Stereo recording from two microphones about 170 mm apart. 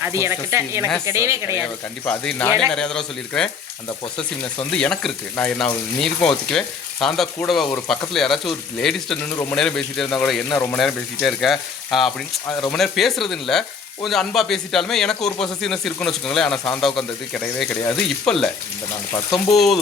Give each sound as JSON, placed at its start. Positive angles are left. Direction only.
{"t": 0.0, "sound": "speech", "side_deg": -15}
{"t": 2.0, "sound": "speech", "side_deg": 10}
{"t": 4.7, "sound": "speech", "side_deg": 5}
{"t": 9.3, "sound": "speech", "side_deg": 15}
{"t": 9.6, "sound": "speech", "side_deg": 0}
{"t": 19.5, "sound": "speech", "side_deg": 0}